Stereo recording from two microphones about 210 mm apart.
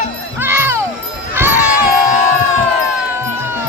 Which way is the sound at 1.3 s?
10° right (ahead or behind).